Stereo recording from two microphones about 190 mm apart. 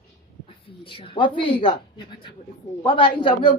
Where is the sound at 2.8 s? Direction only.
25° left (ahead or behind).